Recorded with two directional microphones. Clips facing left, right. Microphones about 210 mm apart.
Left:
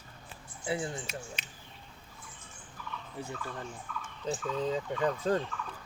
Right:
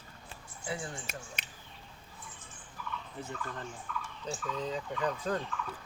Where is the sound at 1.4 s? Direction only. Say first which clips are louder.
Right 1 dB; 55° right (ahead or behind).